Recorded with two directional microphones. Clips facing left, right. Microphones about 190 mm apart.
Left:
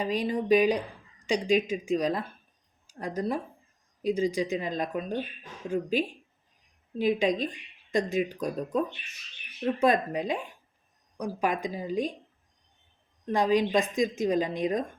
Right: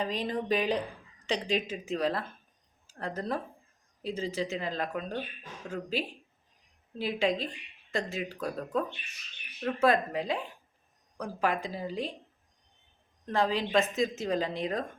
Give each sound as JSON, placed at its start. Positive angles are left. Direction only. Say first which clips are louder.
{"t": 0.0, "sound": "a woman's voice", "louder": "left 4 dB", "side_deg": 10}
{"t": 13.2, "sound": "a woman's voice", "louder": "left 5 dB", "side_deg": 15}